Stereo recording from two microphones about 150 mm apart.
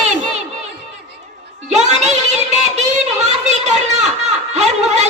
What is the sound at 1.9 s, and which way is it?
Music, 50° right (ahead or behind).